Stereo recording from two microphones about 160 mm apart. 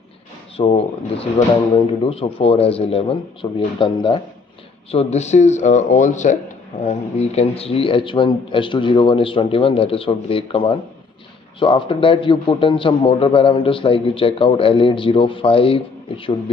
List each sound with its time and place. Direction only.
0.6 s a man's voice: 40° left (ahead or behind)
4.9 s a man's voice: 45° left (ahead or behind)